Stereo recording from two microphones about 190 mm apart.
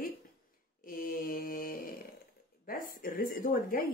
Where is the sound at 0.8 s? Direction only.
50° left (ahead or behind).